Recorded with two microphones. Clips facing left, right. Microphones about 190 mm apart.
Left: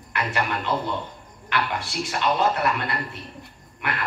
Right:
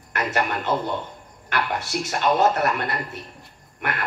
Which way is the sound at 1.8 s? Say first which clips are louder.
Right 2 dB; 45° right (ahead or behind).